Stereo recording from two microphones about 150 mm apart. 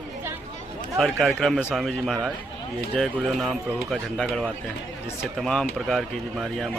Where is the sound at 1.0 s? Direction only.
Centre (ahead or behind).